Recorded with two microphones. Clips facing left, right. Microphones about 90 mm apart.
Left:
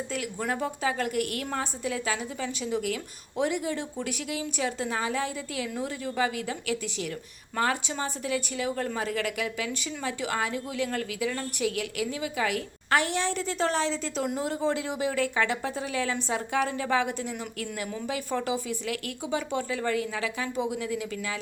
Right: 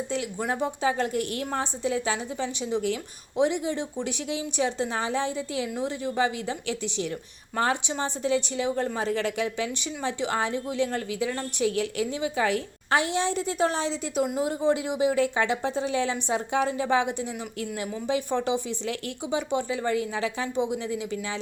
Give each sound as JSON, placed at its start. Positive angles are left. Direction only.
{"t": 0.1, "sound": "speech", "side_deg": -25}